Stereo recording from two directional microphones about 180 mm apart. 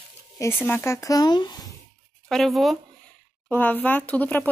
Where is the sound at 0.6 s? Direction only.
15° left (ahead or behind).